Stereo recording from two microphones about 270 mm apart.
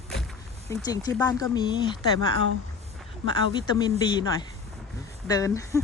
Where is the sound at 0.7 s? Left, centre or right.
Centre.